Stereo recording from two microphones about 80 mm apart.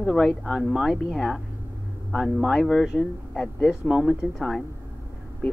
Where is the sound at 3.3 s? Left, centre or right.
Centre.